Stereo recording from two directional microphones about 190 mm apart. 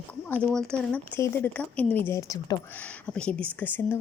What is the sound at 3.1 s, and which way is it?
Speech, 5° left (ahead or behind).